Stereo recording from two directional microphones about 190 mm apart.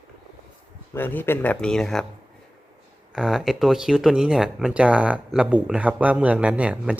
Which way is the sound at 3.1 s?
Centre (ahead or behind).